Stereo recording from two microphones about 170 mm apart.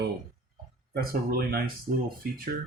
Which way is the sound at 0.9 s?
65° right (ahead or behind).